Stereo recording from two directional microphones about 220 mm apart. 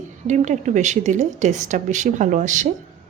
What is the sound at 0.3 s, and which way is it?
A woman's voice, 35° right (ahead or behind).